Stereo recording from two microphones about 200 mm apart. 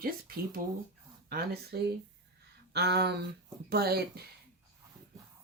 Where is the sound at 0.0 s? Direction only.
45° right (ahead or behind).